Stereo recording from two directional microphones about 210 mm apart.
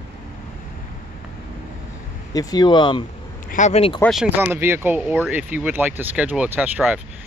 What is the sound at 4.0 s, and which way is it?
Speech, centre (ahead or behind).